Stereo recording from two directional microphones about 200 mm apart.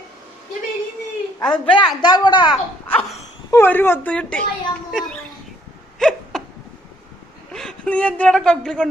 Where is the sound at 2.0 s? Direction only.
20° left (ahead or behind).